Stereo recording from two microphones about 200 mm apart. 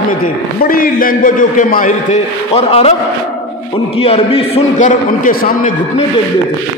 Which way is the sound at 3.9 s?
30° left (ahead or behind).